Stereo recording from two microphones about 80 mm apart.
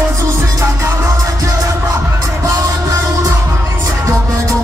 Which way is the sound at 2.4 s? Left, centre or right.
Right.